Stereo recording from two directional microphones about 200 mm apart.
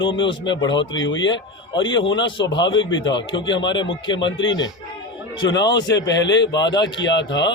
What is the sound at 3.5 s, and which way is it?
Speech, 65° left (ahead or behind).